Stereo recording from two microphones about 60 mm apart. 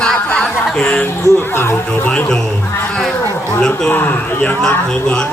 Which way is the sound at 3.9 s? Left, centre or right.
Left.